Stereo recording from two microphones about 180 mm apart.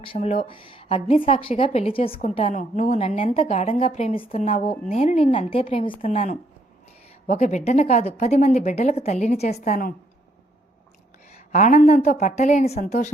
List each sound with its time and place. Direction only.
0.0 s a woman's voice: 30° left (ahead or behind)
11.3 s a woman's voice: 40° left (ahead or behind)